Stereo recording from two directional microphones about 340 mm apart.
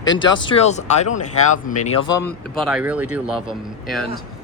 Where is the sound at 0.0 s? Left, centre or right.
Centre.